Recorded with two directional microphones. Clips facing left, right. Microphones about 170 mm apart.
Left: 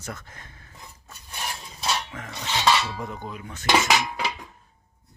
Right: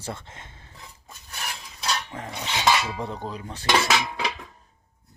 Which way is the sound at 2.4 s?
15° right (ahead or behind).